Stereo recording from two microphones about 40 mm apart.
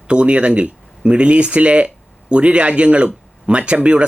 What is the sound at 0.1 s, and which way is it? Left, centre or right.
Speech, right.